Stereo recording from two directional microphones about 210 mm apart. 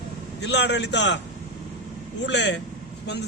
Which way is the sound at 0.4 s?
55° left (ahead or behind).